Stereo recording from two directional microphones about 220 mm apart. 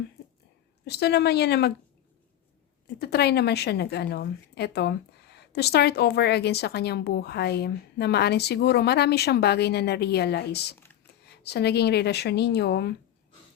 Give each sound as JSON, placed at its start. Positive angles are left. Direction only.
{"t": 0.9, "sound": "a woman's voice", "side_deg": 50}
{"t": 2.8, "sound": "a woman's voice", "side_deg": 45}